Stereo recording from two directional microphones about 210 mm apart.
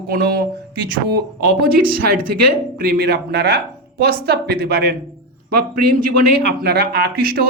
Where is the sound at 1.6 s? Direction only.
45° right (ahead or behind).